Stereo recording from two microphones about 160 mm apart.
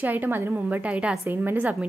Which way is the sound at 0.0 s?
10° right (ahead or behind).